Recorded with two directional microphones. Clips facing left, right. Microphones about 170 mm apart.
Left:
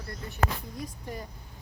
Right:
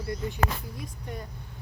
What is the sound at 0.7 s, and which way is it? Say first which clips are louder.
Speech: left 1 dB; centre (ahead or behind).